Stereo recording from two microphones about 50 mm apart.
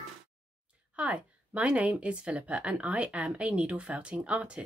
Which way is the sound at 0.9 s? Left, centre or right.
Right.